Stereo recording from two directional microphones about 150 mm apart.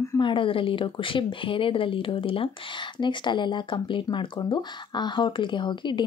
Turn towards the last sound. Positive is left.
turn(degrees=30)  # may be behind; listen again after turning